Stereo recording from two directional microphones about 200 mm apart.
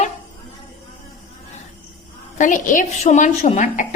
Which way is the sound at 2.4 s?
40° left (ahead or behind).